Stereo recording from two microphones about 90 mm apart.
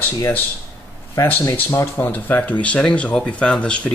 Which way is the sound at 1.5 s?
35° left (ahead or behind).